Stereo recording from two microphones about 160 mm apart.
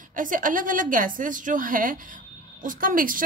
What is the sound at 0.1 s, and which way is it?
A woman's voice, 55° right (ahead or behind).